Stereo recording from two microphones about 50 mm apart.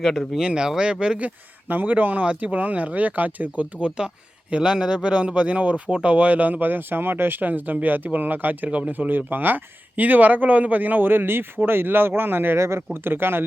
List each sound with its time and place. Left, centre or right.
0.4 s speech: centre
1.6 s speech: right
12.5 s speech: right
12.9 s speech: right